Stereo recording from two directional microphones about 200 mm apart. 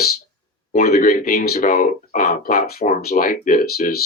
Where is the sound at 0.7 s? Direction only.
50° left (ahead or behind).